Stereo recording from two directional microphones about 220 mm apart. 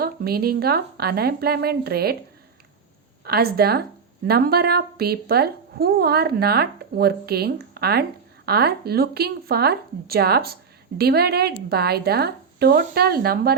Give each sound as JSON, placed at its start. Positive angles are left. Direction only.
{"t": 0.0, "sound": "speech", "side_deg": -45}
{"t": 3.2, "sound": "speech", "side_deg": -45}